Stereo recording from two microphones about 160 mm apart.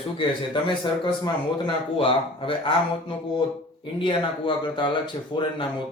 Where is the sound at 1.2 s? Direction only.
30° left (ahead or behind).